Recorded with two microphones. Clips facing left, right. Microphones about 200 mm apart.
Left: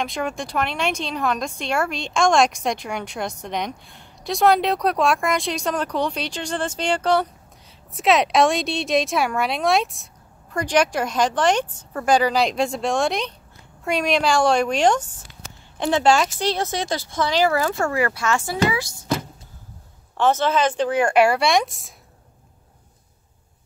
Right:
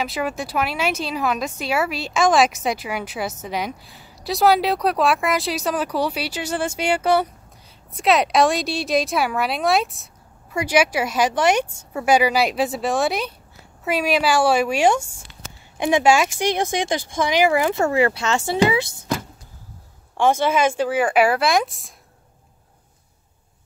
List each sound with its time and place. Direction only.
0.0 s speech: 5° right (ahead or behind); by 18.6 s 25° right (ahead or behind)
20.2 s speech: 10° right (ahead or behind)